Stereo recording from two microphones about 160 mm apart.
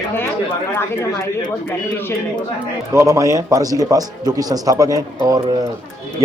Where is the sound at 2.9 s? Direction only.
20° right (ahead or behind).